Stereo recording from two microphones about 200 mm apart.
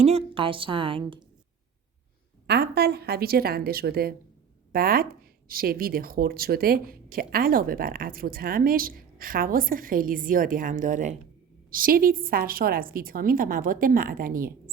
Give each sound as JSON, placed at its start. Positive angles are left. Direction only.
{"t": 0.0, "sound": "a woman's voice", "side_deg": -30}
{"t": 2.5, "sound": "speech", "side_deg": -50}